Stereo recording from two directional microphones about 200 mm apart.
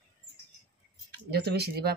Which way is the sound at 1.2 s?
55° right (ahead or behind).